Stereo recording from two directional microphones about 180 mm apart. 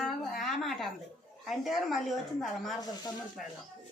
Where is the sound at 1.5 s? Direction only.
Centre (ahead or behind).